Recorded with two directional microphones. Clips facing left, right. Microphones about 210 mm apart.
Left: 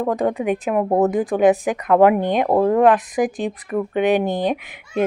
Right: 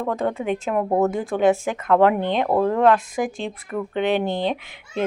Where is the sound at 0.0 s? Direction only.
15° left (ahead or behind).